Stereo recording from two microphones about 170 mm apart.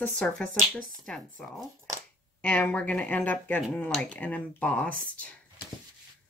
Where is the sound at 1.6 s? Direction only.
20° right (ahead or behind).